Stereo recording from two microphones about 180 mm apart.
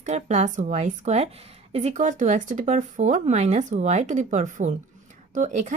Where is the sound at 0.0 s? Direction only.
40° right (ahead or behind).